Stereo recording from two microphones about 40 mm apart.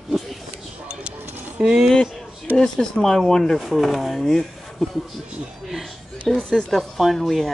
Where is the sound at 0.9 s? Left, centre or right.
Right.